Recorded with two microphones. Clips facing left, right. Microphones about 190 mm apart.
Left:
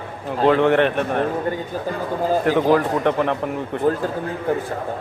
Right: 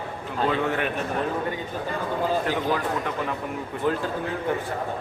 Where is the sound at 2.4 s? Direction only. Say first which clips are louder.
Left 8 dB; 55° left (ahead or behind).